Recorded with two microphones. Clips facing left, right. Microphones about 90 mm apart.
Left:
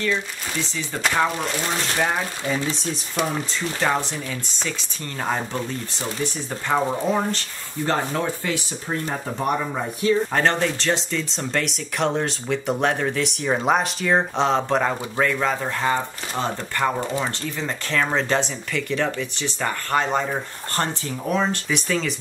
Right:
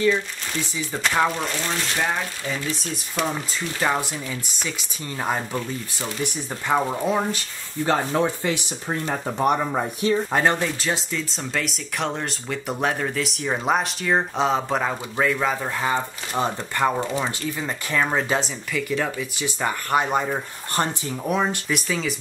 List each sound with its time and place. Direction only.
0.0 s speech: 10° right (ahead or behind)
3.8 s speech: 5° right (ahead or behind)
16.3 s speech: 15° right (ahead or behind)